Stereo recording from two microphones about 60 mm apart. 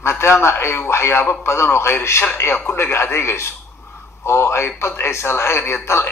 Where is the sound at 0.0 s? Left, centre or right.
Left.